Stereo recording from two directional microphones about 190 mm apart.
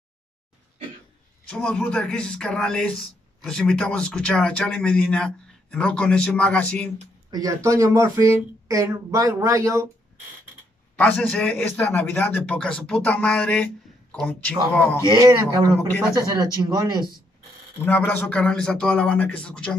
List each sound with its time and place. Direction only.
1.5 s speech: 5° left (ahead or behind)
7.2 s speech: 20° right (ahead or behind)
11.0 s a man's voice: 5° left (ahead or behind)
14.7 s a man's voice: 10° left (ahead or behind)
15.0 s speech: 20° right (ahead or behind)
17.8 s speech: 10° left (ahead or behind)